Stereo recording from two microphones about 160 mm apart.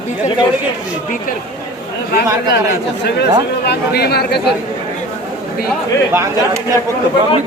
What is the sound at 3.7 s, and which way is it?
Speech, 85° left.